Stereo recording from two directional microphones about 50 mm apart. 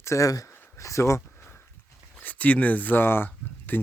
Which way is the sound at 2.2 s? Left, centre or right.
Left.